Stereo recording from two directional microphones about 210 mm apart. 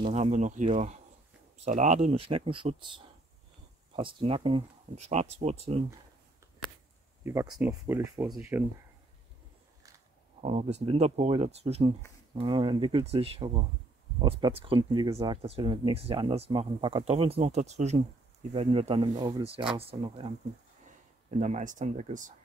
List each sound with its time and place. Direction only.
0.0 s speech: 35° right (ahead or behind)
3.9 s speech: 25° right (ahead or behind)
7.2 s speech: 15° right (ahead or behind)
10.4 s speech: 30° right (ahead or behind)
21.4 s speech: 35° right (ahead or behind)